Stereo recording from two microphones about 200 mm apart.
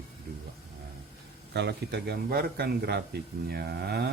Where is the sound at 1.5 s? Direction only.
55° right (ahead or behind).